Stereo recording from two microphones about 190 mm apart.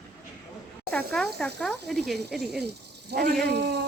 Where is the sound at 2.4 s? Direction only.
60° right (ahead or behind).